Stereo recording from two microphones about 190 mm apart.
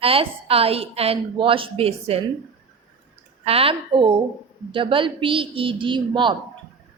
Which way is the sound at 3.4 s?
30° right (ahead or behind).